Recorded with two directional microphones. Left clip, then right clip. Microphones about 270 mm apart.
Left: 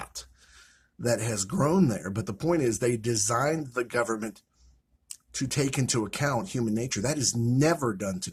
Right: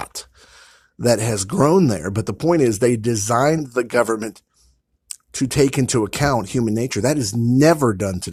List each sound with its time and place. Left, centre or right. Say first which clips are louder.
0.0 s speech: right 9 dB; right